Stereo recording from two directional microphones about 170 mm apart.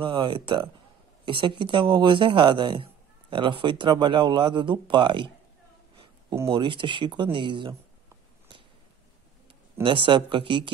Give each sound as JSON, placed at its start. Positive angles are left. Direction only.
{"t": 0.0, "sound": "speech", "side_deg": -30}
{"t": 6.4, "sound": "speech", "side_deg": -30}
{"t": 9.8, "sound": "speech", "side_deg": -30}